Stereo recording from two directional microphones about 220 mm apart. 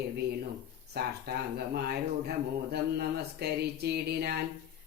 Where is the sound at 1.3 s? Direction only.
45° right (ahead or behind).